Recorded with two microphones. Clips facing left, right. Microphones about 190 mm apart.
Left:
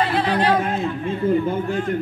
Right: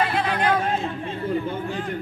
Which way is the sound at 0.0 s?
30° left (ahead or behind).